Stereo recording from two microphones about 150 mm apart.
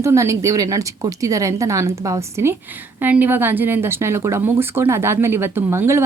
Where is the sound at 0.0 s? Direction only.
20° right (ahead or behind).